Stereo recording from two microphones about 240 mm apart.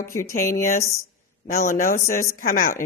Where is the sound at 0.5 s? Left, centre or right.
Left.